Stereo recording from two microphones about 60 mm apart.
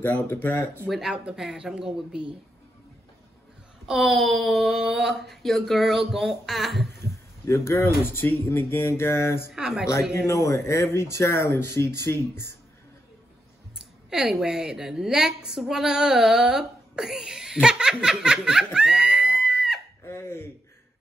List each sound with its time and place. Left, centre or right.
0.0 s speech: left
0.8 s speech: centre
1.1 s speech: centre
3.8 s speech: centre
7.4 s speech: left
9.6 s speech: centre
10.2 s speech: left
13.7 s a woman's voice: centre
20.1 s a sound: left